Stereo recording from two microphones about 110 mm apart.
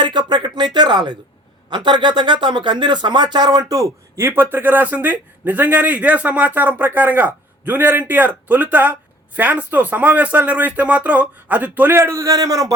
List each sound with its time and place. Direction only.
0.0 s a man's voice: 45° right (ahead or behind)